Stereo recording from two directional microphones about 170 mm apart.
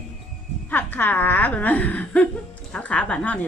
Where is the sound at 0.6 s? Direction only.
10° left (ahead or behind).